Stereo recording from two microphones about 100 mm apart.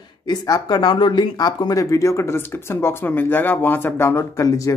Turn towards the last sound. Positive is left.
turn(degrees=35)  # may be behind; listen again after turning